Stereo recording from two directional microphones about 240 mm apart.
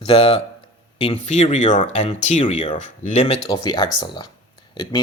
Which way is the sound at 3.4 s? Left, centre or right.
Centre.